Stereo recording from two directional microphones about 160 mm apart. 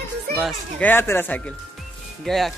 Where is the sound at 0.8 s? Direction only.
15° left (ahead or behind).